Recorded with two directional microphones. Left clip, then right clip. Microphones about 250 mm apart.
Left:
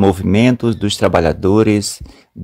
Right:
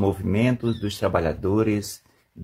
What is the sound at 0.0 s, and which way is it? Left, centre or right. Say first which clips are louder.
Speech: left 10 dB; left.